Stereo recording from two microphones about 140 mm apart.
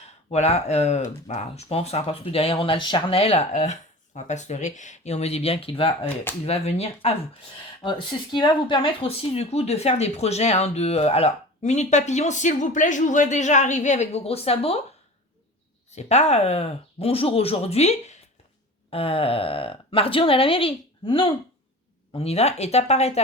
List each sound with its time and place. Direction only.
0.3 s speech: 50° left (ahead or behind)
1.7 s speech: 45° left (ahead or behind)
7.9 s speech: 35° left (ahead or behind)
16.0 s speech: 55° left (ahead or behind)
18.9 s speech: 40° left (ahead or behind)